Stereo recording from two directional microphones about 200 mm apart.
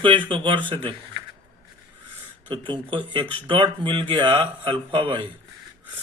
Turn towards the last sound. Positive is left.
turn(degrees=-25)  # may be behind; listen again after turning